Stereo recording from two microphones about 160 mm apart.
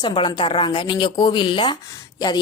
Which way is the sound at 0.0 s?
30° left (ahead or behind).